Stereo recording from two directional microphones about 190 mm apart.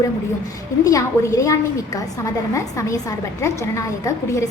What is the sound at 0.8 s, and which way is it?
A woman's voice, 15° left (ahead or behind).